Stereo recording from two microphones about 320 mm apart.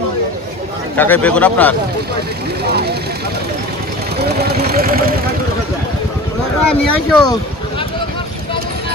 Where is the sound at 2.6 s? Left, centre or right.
Right.